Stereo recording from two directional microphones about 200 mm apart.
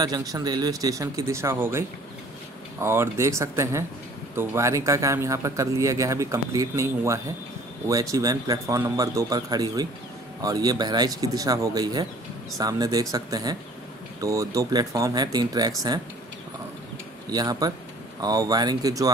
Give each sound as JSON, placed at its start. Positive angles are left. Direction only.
{"t": 0.0, "sound": "speech", "side_deg": -20}
{"t": 17.3, "sound": "speech", "side_deg": -20}